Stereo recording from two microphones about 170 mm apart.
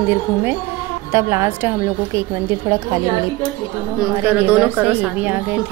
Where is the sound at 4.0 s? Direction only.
10° right (ahead or behind).